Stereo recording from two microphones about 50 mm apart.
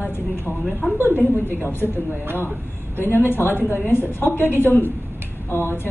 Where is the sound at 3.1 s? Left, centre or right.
Left.